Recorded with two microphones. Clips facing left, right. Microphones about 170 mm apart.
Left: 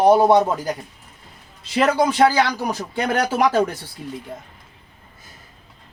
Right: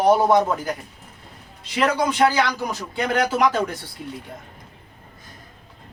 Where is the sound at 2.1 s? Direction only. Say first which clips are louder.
Left 2 dB; 40° left (ahead or behind).